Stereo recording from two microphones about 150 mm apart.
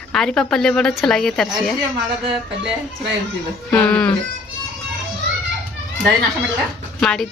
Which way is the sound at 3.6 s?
5° left (ahead or behind).